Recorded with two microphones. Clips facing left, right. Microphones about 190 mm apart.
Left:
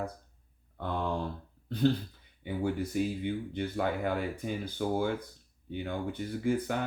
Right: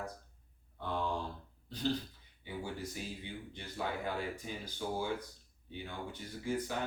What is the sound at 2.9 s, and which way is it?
Speech, 60° left (ahead or behind).